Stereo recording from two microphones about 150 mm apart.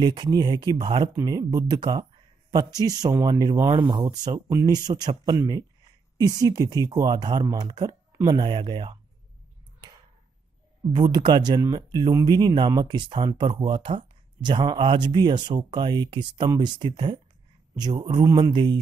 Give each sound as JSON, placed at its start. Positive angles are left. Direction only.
{"t": 0.0, "sound": "speech", "side_deg": -30}
{"t": 10.9, "sound": "speech", "side_deg": -30}